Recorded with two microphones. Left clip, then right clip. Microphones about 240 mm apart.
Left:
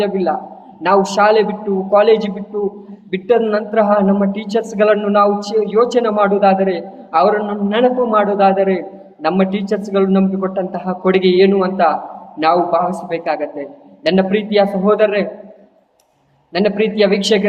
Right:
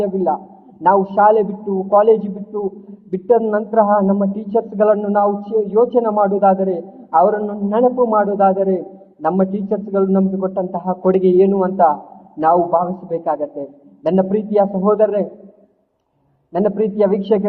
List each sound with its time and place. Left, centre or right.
0.0 s a man's voice: centre
16.5 s a man's voice: centre